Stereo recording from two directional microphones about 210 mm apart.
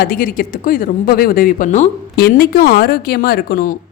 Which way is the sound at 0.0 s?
45° left (ahead or behind).